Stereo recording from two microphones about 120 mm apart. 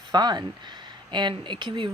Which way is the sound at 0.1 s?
35° right (ahead or behind).